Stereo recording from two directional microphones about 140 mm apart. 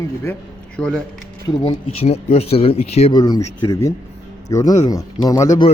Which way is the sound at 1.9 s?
45° left (ahead or behind).